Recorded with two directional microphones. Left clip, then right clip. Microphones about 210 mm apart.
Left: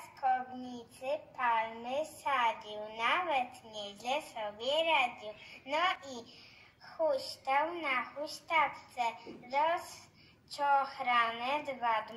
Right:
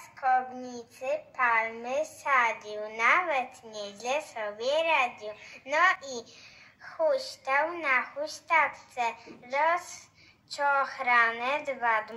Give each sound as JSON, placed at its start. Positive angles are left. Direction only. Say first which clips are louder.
{"t": 1.0, "sound": "a woman's voice", "louder": "right 6 dB", "side_deg": -30}